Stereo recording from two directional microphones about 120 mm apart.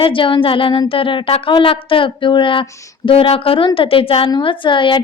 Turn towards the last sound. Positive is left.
turn(degrees=40)  # may be behind; listen again after turning